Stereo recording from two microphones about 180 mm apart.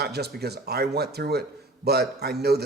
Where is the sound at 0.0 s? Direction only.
65° right (ahead or behind).